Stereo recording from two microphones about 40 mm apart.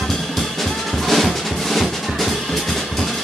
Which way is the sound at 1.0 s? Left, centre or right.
Centre.